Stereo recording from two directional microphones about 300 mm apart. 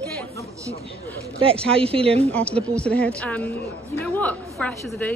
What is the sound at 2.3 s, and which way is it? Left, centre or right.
A woman's voice, centre.